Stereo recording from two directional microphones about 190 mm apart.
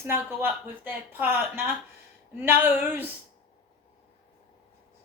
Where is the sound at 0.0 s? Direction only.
10° right (ahead or behind).